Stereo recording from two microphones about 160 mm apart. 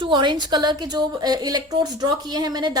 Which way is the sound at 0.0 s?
30° right (ahead or behind).